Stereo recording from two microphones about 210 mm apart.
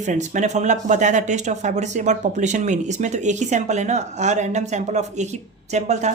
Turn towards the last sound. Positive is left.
turn(degrees=-35)  # may be behind; listen again after turning